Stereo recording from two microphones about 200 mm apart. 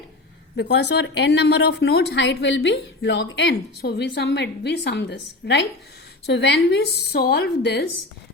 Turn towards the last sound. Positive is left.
turn(degrees=55)  # may be behind; listen again after turning